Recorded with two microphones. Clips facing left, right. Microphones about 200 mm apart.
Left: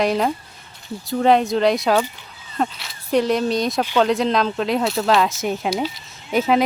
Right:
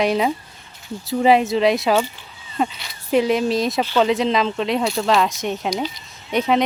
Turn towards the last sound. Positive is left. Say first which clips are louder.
# left 1 dB
turn(degrees=5)  # may be behind; listen again after turning